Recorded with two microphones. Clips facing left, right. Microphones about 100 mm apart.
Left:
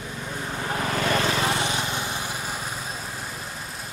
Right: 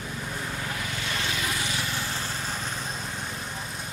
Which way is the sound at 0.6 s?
45° left (ahead or behind).